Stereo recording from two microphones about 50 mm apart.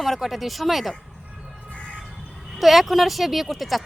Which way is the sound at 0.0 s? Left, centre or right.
Centre.